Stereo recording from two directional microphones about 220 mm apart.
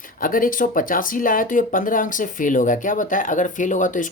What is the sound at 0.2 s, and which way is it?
Speech, 40° left (ahead or behind).